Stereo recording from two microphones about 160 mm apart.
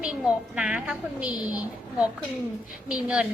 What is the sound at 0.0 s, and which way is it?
A woman's voice, 5° right (ahead or behind).